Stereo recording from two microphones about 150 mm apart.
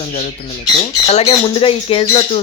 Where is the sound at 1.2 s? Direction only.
40° left (ahead or behind).